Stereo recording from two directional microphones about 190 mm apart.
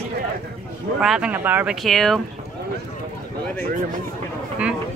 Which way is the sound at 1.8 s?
Centre (ahead or behind).